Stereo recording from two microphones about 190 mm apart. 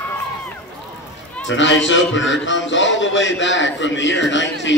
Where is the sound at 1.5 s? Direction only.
75° left (ahead or behind).